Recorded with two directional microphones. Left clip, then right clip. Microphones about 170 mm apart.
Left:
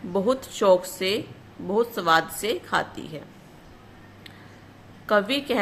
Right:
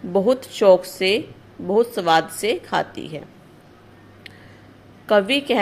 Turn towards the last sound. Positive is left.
turn(degrees=-20)  # may be behind; listen again after turning